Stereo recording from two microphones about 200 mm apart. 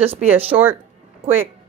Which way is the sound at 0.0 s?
30° right (ahead or behind).